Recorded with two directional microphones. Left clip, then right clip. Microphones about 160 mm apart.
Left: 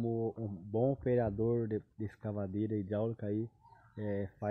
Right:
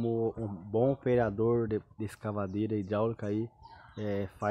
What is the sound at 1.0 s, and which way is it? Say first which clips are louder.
Speech: right 4 dB; 10° right (ahead or behind).